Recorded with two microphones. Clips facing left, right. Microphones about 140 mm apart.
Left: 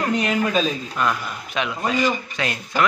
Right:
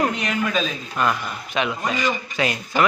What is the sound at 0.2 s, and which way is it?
Speech, 35° left (ahead or behind).